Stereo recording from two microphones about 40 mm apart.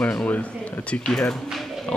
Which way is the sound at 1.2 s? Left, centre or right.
Centre.